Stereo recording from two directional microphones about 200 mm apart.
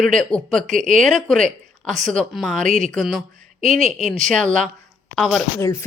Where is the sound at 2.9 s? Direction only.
Centre (ahead or behind).